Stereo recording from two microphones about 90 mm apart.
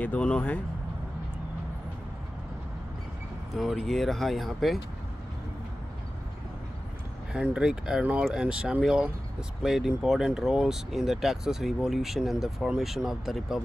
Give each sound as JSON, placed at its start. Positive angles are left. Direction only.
{"t": 0.0, "sound": "speech", "side_deg": 15}
{"t": 3.5, "sound": "speech", "side_deg": 0}
{"t": 7.5, "sound": "speech", "side_deg": -10}